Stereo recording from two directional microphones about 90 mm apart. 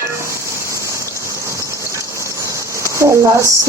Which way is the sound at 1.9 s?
35° right (ahead or behind).